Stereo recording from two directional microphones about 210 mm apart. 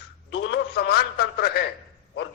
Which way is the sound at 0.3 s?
55° left (ahead or behind).